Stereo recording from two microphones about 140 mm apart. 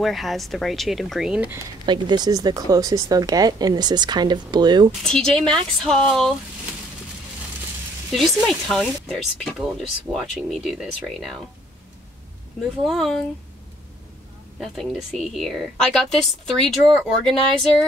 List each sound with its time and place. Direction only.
0.0 s speech: centre (ahead or behind)
1.9 s speech: 30° right (ahead or behind)
5.0 s speech: 5° left (ahead or behind)
8.1 s speech: centre (ahead or behind)
12.8 s speech: centre (ahead or behind)
14.6 s speech: centre (ahead or behind)